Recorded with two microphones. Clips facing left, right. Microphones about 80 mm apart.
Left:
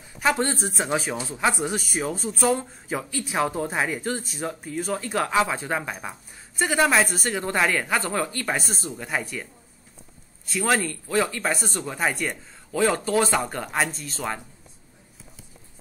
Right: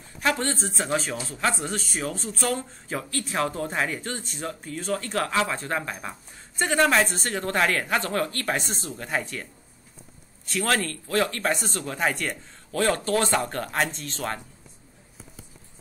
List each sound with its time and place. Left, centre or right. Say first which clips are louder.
0.2 s a man's voice: left 2 dB; centre